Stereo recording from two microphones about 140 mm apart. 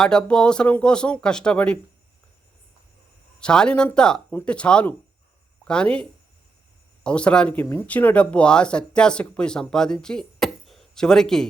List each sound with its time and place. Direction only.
0.0 s speech: 5° left (ahead or behind)
3.4 s speech: 5° left (ahead or behind)